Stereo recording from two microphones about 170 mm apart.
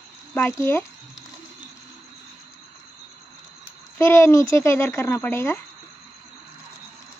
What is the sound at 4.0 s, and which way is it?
Speech, 15° left (ahead or behind).